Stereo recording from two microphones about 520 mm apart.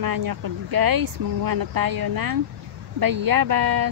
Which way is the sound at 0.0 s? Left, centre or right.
Right.